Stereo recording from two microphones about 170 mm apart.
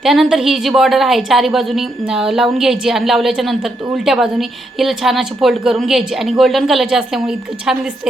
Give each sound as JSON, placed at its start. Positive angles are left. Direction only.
{"t": 0.0, "sound": "a woman's voice", "side_deg": 0}